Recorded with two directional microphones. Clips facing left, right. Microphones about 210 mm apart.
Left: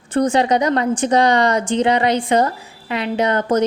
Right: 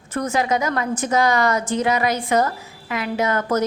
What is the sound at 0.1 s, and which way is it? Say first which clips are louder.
A woman's voice: left 5 dB; 30° left (ahead or behind).